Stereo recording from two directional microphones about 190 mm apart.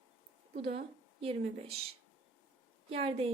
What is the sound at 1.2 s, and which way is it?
Speech, 30° right (ahead or behind).